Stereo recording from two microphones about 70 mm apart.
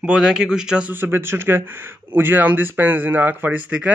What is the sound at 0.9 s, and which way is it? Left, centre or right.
Speech, right.